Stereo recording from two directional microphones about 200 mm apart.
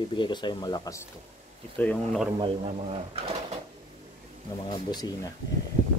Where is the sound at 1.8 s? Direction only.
5° left (ahead or behind).